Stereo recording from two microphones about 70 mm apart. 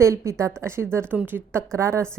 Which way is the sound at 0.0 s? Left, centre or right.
Right.